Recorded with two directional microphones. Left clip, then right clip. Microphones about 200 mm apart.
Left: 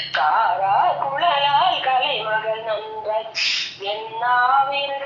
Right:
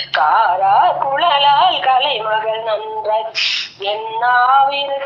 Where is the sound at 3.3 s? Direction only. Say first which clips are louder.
Right 4 dB; 20° right (ahead or behind).